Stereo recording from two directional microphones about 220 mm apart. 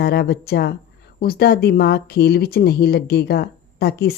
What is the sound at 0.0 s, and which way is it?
Speech, 45° left (ahead or behind).